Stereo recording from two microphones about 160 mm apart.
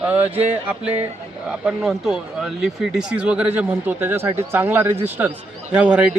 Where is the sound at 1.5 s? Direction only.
5° right (ahead or behind).